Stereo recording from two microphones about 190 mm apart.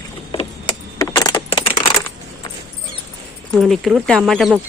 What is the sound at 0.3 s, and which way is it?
Keys jangling, 25° left (ahead or behind).